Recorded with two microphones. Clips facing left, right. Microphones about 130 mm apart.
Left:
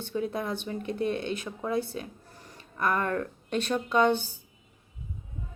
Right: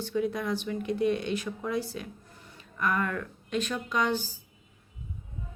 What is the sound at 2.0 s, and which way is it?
Speech, 35° left (ahead or behind).